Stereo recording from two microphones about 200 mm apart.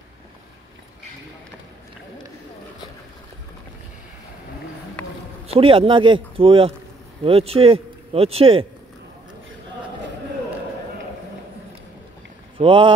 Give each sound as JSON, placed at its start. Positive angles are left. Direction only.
{"t": 5.5, "sound": "speech", "side_deg": -25}
{"t": 12.5, "sound": "speech", "side_deg": -25}